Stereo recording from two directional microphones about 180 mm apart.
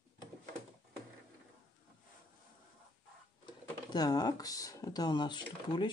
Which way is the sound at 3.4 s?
25° left (ahead or behind).